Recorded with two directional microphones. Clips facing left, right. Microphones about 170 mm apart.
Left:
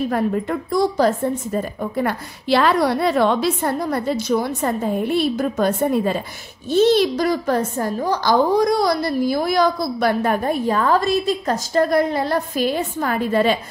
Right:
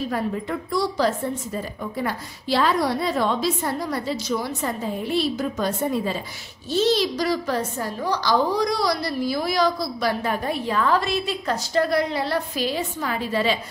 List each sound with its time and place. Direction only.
0.1 s a woman's voice: 50° left (ahead or behind)